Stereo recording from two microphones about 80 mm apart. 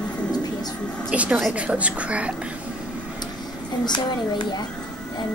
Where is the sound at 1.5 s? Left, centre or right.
Centre.